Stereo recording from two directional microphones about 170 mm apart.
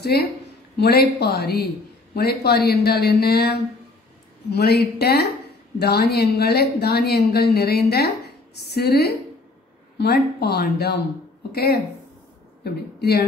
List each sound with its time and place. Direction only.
0.0 s speech: 70° left (ahead or behind)